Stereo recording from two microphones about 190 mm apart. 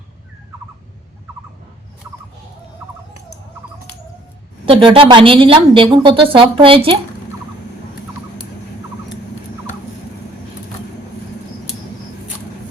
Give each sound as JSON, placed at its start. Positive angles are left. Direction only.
{"t": 4.6, "sound": "speech", "side_deg": -25}